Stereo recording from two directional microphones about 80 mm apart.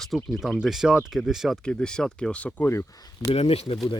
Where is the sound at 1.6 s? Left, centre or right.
Centre.